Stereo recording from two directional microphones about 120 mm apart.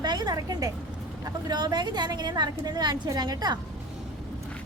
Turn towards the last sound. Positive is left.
turn(degrees=-35)  # may be behind; listen again after turning